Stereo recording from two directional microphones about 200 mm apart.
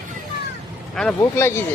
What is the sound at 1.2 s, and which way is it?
Speech, 10° left (ahead or behind).